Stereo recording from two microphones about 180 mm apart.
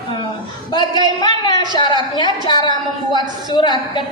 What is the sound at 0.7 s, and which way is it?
A woman's voice, 25° left (ahead or behind).